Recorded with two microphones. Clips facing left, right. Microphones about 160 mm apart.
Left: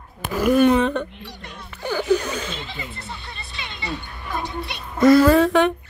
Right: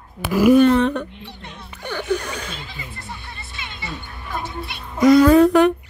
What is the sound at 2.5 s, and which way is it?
Music, 20° left (ahead or behind).